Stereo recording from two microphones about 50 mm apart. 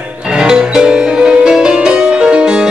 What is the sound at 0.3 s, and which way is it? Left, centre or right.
Music, centre.